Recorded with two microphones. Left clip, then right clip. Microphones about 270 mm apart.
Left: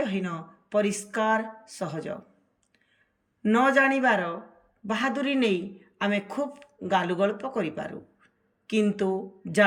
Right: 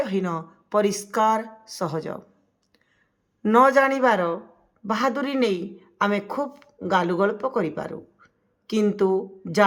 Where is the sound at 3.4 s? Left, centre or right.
Centre.